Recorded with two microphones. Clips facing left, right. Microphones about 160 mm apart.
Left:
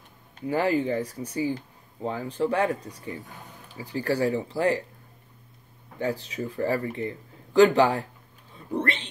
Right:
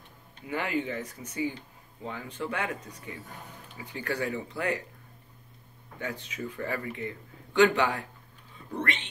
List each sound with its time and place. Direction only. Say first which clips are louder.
0.5 s speech: left 7 dB; 35° left (ahead or behind)
5.9 s speech: left 7 dB; 35° left (ahead or behind)